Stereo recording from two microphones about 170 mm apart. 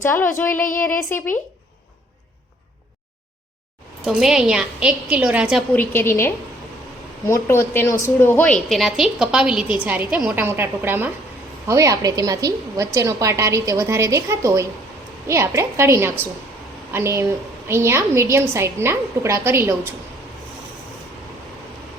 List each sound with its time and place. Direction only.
0.0 s a woman's voice: 15° left (ahead or behind)
4.0 s a woman's voice: 5° right (ahead or behind)
5.7 s a woman's voice: 10° left (ahead or behind); by 19.9 s 15° right (ahead or behind)